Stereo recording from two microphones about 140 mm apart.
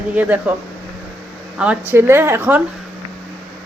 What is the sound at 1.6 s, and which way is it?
Speech, 10° right (ahead or behind).